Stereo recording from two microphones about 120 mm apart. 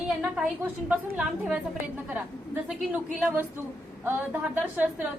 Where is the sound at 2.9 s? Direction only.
15° right (ahead or behind).